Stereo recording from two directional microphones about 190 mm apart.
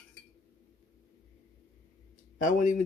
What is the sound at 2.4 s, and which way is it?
Speech, 45° left (ahead or behind).